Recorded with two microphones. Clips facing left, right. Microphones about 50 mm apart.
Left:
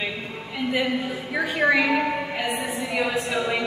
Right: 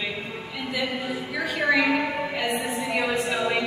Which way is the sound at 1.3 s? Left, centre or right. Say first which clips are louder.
Left 3 dB; left.